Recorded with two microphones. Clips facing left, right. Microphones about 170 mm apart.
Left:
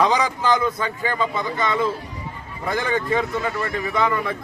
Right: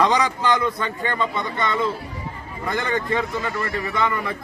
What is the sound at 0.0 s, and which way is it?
Speech, 5° left (ahead or behind).